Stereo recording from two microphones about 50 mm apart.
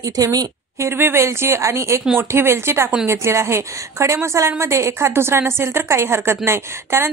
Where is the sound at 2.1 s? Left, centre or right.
Right.